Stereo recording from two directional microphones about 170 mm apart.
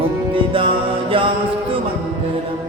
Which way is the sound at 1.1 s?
30° right (ahead or behind).